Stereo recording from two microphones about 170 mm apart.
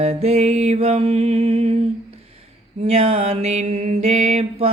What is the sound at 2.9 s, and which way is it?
Mantra, 40° right (ahead or behind).